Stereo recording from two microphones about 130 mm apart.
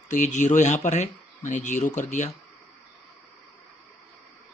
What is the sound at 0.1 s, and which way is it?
Speech, 70° left (ahead or behind).